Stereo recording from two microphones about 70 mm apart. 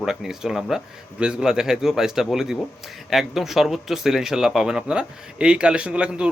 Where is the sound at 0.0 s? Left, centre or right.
Centre.